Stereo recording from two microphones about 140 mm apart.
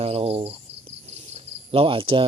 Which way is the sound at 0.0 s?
45° right (ahead or behind).